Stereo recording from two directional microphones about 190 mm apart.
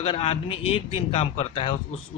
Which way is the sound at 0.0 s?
30° left (ahead or behind).